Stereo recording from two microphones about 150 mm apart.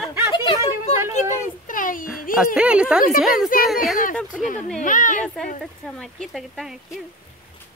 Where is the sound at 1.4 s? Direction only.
65° left (ahead or behind).